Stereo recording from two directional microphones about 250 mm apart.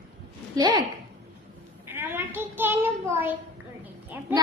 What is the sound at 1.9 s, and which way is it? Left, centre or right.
A child's voice, centre.